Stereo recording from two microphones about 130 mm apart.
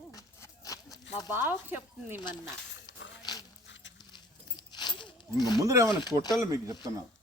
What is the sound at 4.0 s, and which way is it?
Horse, 35° left (ahead or behind).